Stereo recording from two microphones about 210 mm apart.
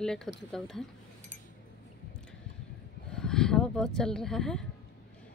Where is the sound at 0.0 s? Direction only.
Centre (ahead or behind).